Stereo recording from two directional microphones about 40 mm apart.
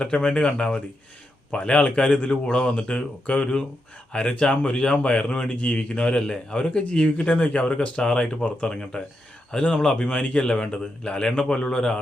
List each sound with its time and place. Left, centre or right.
0.0 s a man's voice: left